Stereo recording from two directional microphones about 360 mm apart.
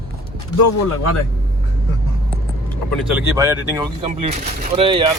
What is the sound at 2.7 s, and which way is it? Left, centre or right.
Speech, centre.